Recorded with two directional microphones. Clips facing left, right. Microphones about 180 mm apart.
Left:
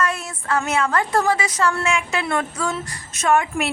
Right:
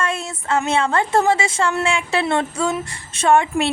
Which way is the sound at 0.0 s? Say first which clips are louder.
Even; 25° right (ahead or behind).